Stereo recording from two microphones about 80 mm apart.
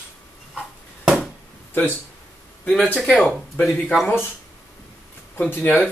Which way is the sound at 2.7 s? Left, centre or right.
Left.